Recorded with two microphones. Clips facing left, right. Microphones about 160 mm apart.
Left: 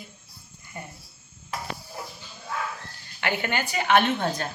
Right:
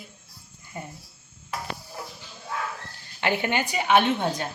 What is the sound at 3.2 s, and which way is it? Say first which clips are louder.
A woman's voice: right 3 dB; 25° right (ahead or behind).